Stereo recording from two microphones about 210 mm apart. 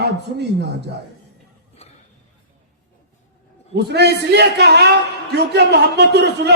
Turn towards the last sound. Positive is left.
turn(degrees=-55)  # may be behind; listen again after turning